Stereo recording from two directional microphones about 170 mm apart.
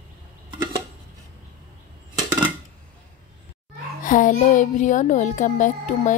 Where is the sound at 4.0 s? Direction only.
50° left (ahead or behind).